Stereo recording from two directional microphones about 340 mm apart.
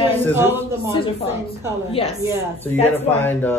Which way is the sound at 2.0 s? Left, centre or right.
Centre.